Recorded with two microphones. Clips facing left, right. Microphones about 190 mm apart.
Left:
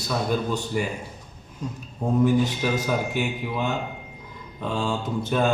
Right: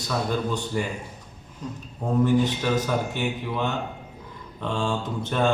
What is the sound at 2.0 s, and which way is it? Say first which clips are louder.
A man's voice: left 1 dB; 10° left (ahead or behind).